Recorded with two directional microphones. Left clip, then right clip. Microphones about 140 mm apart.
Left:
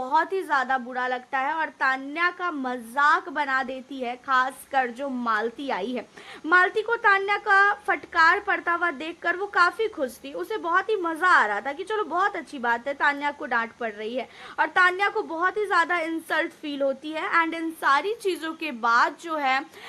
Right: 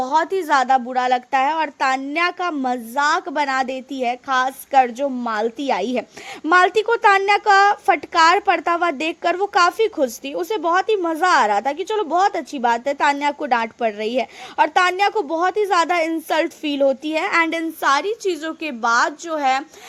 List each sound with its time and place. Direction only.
0.0 s a woman's voice: 25° right (ahead or behind)
0.4 s a woman's voice: 60° right (ahead or behind)
18.0 s a woman's voice: 30° right (ahead or behind)